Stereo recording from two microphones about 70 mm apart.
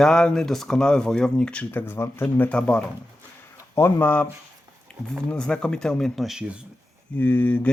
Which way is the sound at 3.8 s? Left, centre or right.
Left.